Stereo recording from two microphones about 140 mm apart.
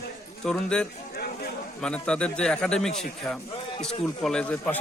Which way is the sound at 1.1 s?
90° left.